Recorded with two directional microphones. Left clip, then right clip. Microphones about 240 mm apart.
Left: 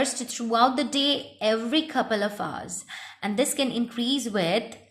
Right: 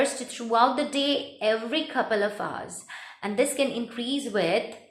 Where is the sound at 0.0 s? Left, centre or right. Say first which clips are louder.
Right 1 dB; left.